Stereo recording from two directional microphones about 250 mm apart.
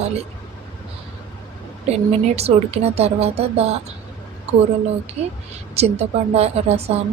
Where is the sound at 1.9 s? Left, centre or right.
Right.